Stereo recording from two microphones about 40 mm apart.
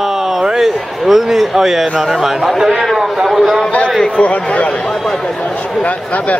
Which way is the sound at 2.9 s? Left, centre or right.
Centre.